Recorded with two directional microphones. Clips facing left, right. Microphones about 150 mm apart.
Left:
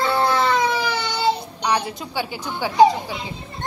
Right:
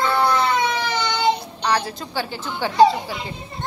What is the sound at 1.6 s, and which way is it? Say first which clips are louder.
A child's voice: even; 15° left (ahead or behind).